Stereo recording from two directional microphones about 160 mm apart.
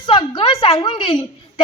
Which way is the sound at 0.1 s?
30° left (ahead or behind).